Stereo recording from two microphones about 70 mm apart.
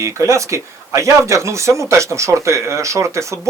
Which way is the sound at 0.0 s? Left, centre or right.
Right.